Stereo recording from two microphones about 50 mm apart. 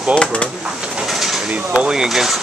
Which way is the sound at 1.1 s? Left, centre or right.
Centre.